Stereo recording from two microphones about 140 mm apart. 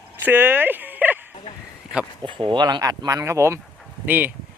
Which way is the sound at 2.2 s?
35° right (ahead or behind).